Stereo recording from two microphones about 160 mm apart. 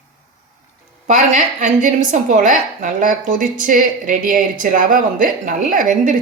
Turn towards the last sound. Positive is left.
turn(degrees=-55)  # may be behind; listen again after turning